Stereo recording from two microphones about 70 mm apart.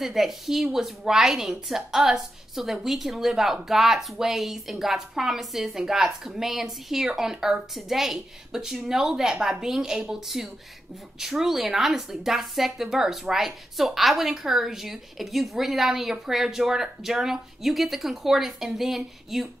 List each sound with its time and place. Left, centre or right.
0.0 s a woman's voice: centre